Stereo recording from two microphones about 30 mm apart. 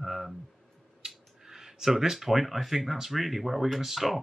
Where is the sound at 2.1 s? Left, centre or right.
Centre.